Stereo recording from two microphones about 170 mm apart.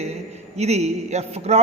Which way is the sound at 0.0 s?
40° right (ahead or behind).